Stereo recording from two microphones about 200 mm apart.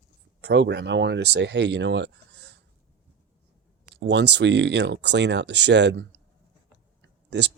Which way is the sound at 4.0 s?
60° right (ahead or behind).